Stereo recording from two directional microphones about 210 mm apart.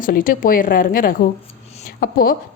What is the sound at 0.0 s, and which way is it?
A woman's voice, 40° left (ahead or behind).